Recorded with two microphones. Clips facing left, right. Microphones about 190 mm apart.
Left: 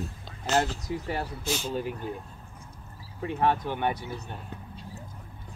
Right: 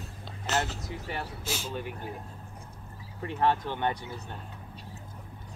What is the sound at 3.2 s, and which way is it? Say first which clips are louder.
Speech: left 1 dB; 15° left (ahead or behind).